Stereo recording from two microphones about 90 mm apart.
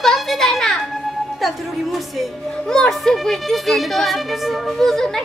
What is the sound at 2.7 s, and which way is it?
A woman's voice, 5° left (ahead or behind).